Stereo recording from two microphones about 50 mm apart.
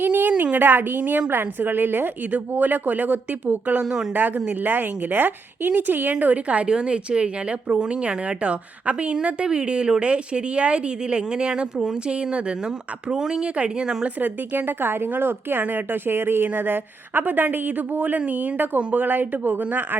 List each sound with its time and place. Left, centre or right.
0.0 s a sound: right
0.5 s speech: right
3.8 s speech: centre
4.6 s speech: right
14.0 s speech: right